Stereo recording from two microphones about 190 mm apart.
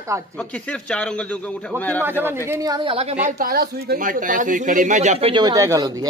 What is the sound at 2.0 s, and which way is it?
Speech, 10° right (ahead or behind).